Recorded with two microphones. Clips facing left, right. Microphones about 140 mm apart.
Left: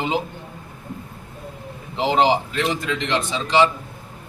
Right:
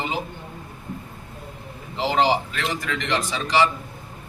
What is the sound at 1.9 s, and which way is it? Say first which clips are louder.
A man's voice: left 2 dB; 20° left (ahead or behind).